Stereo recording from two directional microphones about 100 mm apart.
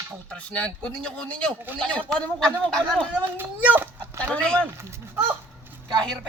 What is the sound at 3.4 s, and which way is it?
Speech, 20° right (ahead or behind).